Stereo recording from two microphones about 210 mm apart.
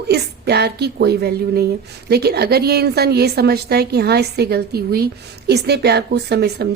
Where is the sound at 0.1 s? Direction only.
50° right (ahead or behind).